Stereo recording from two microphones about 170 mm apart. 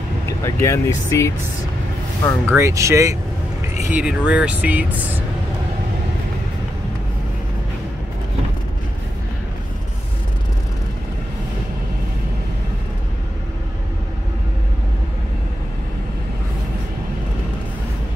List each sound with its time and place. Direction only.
0.4 s speech: 15° left (ahead or behind)
2.5 s speech: 15° right (ahead or behind)